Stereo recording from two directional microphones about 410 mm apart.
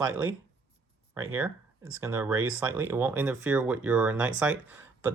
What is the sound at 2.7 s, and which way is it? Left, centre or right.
Speech, centre.